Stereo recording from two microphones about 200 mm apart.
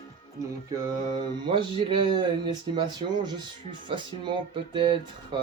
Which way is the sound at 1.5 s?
25° right (ahead or behind).